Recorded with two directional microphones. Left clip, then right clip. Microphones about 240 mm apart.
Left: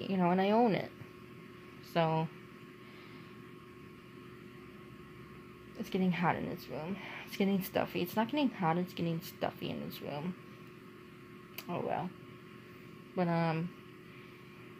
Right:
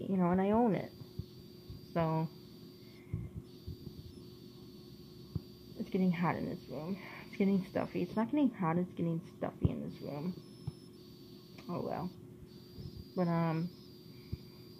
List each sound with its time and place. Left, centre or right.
0.0 s speech: left
2.0 s speech: left
5.9 s speech: left
11.5 s speech: left
13.1 s speech: left